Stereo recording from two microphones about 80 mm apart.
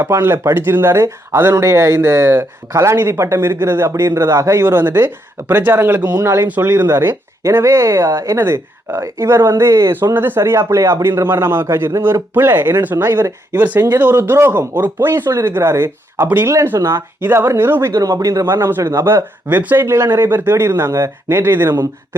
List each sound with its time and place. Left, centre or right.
0.0 s speech: right
8.4 s speech: right
12.3 s speech: right
18.0 s speech: right
18.4 s speech: right
19.5 s speech: right